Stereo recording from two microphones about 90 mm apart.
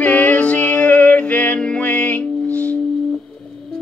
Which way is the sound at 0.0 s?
15° left (ahead or behind).